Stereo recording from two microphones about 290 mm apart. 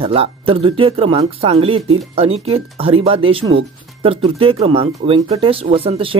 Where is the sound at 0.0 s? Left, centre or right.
Centre.